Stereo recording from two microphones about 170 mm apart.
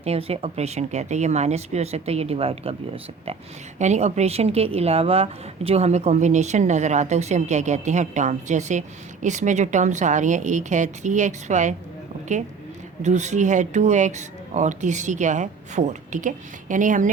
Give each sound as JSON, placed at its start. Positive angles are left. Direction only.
{"t": 0.0, "sound": "a woman's voice", "side_deg": -35}
{"t": 13.0, "sound": "a woman's voice", "side_deg": -45}